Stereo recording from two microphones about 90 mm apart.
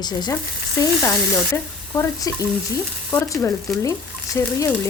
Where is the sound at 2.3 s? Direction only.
40° left (ahead or behind).